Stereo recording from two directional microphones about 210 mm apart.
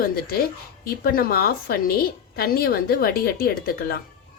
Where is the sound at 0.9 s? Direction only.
45° left (ahead or behind).